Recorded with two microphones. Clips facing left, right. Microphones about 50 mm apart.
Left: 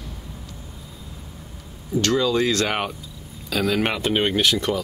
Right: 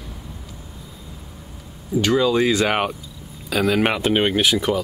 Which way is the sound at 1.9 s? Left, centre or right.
Centre.